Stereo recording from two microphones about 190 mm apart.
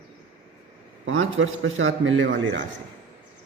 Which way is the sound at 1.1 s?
90° right.